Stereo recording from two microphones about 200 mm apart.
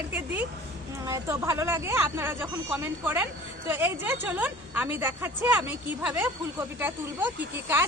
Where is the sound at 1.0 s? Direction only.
15° right (ahead or behind).